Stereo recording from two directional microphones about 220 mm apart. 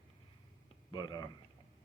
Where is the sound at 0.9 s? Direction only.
20° left (ahead or behind).